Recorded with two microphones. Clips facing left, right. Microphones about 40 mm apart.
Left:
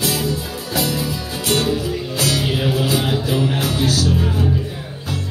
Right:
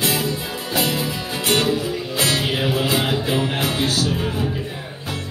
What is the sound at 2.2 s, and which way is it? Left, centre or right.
Music, right.